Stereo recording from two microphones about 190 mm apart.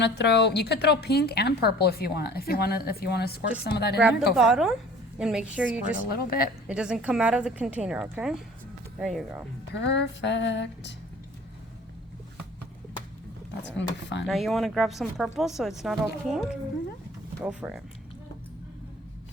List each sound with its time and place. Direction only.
0.0 s a woman's voice: 65° left (ahead or behind)
4.4 s speech: 5° right (ahead or behind)
6.1 s a woman's voice: 50° left (ahead or behind)
6.7 s speech: 5° right (ahead or behind)
9.7 s music: 65° left (ahead or behind)
13.7 s music: 70° left (ahead or behind)
14.3 s speech: centre (ahead or behind)